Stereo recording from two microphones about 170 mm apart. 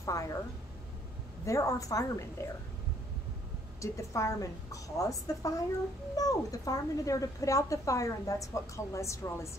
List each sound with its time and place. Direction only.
0.0 s speech: 20° left (ahead or behind)
1.4 s speech: 20° left (ahead or behind)
3.8 s speech: 20° left (ahead or behind)